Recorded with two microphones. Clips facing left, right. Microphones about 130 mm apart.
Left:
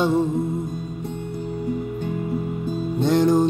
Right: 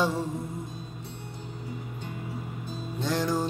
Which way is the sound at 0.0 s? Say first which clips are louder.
Left 8 dB; 20° left (ahead or behind).